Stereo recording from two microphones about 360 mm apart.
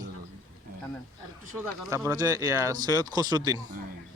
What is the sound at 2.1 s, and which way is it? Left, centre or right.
Speech, centre.